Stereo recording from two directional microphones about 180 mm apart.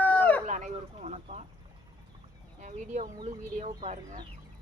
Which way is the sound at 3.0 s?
35° right (ahead or behind).